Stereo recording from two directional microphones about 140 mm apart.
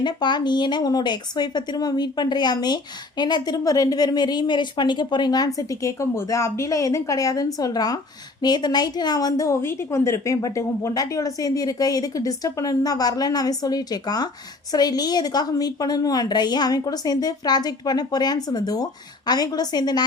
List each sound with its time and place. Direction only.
0.0 s speech: 30° left (ahead or behind)